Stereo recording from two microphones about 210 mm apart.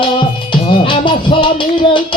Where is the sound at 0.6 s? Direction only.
25° left (ahead or behind).